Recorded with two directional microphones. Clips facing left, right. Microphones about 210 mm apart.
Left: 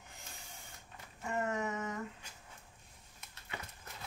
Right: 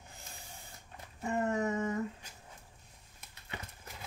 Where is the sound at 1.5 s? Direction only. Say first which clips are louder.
Right 5 dB; 30° right (ahead or behind).